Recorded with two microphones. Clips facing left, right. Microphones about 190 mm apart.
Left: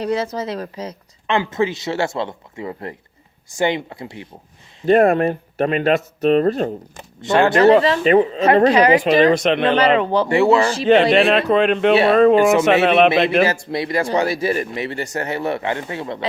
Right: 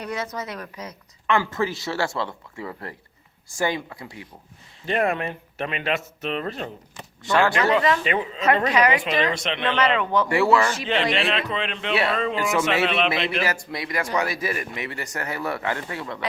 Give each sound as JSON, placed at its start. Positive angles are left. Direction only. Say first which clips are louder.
{"t": 0.0, "sound": "speech", "louder": "left 8 dB", "side_deg": 30}
{"t": 4.9, "sound": "speech", "louder": "left 10 dB", "side_deg": 40}
{"t": 7.2, "sound": "speech", "louder": "left 5 dB", "side_deg": 25}
{"t": 7.5, "sound": "speech", "louder": "left 8 dB", "side_deg": 35}
{"t": 9.7, "sound": "speech", "louder": "left 6 dB", "side_deg": 35}
{"t": 11.1, "sound": "speech", "louder": "left 10 dB", "side_deg": 50}
{"t": 13.4, "sound": "speech", "louder": "left 8 dB", "side_deg": 30}